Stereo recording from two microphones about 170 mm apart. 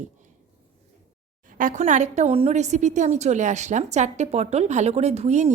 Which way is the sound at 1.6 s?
50° right (ahead or behind).